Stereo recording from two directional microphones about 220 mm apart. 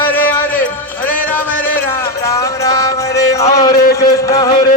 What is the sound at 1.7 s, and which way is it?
Music, 10° left (ahead or behind).